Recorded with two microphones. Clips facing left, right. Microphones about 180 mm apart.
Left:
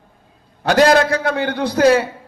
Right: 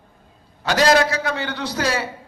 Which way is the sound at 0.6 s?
55° left (ahead or behind).